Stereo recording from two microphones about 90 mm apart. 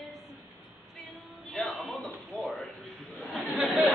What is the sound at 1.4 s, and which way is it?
Music, centre (ahead or behind).